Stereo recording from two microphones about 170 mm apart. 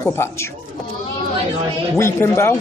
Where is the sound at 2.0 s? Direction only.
15° left (ahead or behind).